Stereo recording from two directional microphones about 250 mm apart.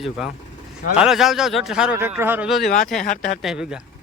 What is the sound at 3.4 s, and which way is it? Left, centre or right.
Speech, centre.